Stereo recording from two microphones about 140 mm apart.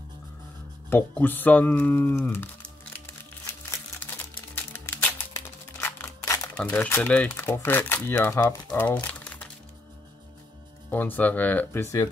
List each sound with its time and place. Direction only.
0.8 s speech: 15° left (ahead or behind)
4.6 s a sound: 15° left (ahead or behind)
6.5 s speech: 10° left (ahead or behind)
8.6 s speech: 10° left (ahead or behind)
10.9 s speech: 10° left (ahead or behind)